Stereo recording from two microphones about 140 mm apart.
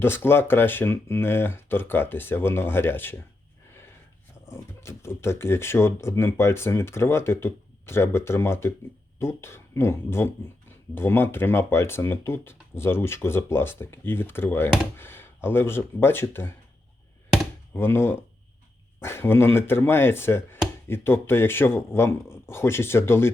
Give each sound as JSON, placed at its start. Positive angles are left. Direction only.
{"t": 0.0, "sound": "speech", "side_deg": 15}
{"t": 4.5, "sound": "speech", "side_deg": 20}
{"t": 17.7, "sound": "speech", "side_deg": 15}